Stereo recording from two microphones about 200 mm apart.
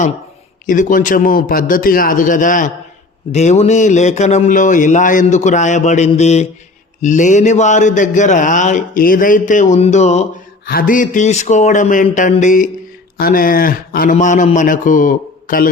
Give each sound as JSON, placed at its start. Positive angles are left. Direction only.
{"t": 0.7, "sound": "a man's voice", "side_deg": 40}
{"t": 10.7, "sound": "a man's voice", "side_deg": 45}